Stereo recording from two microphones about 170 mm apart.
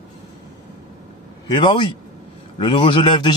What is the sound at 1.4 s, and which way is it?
A man's voice, 30° left (ahead or behind).